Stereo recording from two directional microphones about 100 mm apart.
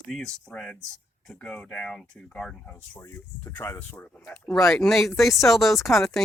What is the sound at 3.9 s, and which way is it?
Speech, 15° left (ahead or behind).